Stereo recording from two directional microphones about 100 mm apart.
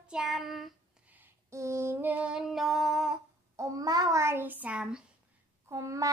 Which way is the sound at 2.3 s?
5° right (ahead or behind).